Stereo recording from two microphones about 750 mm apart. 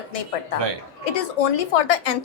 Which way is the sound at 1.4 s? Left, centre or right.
Left.